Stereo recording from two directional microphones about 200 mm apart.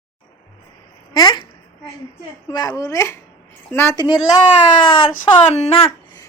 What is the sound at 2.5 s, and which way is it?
Speech, 20° left (ahead or behind).